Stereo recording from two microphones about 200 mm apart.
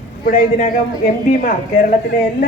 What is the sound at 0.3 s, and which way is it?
A woman's voice, 40° left (ahead or behind).